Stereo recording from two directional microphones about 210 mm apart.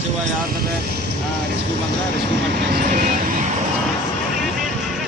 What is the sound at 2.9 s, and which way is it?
Vehicle, 40° right (ahead or behind).